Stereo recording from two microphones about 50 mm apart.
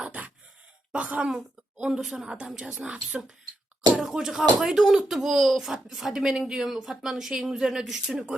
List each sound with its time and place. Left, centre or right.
0.9 s speech: right
1.8 s a woman's voice: centre
4.0 s a woman's voice: centre